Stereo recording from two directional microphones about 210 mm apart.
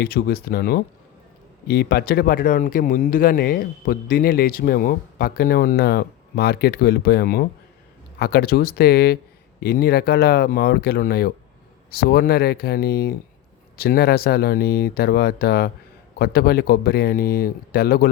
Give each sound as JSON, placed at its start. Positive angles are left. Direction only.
{"t": 0.0, "sound": "speech", "side_deg": 45}